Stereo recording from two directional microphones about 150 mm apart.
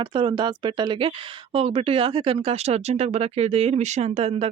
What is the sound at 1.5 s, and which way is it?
Speech, 40° right (ahead or behind).